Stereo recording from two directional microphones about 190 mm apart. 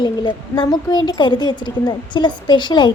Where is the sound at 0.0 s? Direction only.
25° left (ahead or behind).